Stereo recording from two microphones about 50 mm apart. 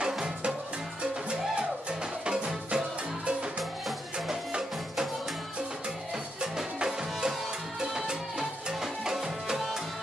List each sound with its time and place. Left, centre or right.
0.0 s music: centre
4.3 s music: centre
6.4 s music: centre